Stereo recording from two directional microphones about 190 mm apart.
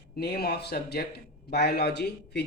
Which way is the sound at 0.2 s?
55° left (ahead or behind).